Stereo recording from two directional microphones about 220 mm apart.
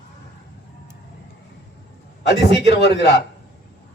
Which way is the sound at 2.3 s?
50° left (ahead or behind).